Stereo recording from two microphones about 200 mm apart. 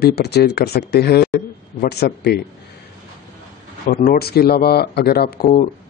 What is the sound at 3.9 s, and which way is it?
Speech, 45° left (ahead or behind).